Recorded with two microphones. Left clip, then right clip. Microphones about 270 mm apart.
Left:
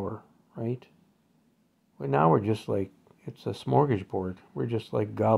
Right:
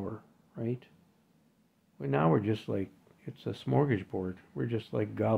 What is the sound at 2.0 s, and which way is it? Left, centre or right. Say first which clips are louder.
Speech: left 5 dB; centre.